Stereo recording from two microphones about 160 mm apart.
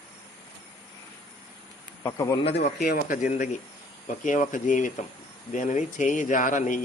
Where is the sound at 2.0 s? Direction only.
20° left (ahead or behind).